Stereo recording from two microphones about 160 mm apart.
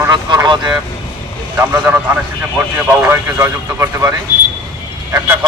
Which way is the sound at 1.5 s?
10° right (ahead or behind).